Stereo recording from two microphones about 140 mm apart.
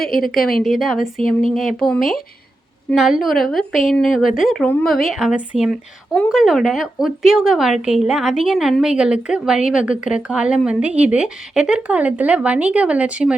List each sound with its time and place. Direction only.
0.6 s a woman's voice: centre (ahead or behind)
0.9 s speech: 70° left (ahead or behind)
1.5 s a woman's voice: centre (ahead or behind)